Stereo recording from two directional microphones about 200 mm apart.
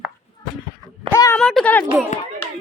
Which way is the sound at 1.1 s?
10° left (ahead or behind).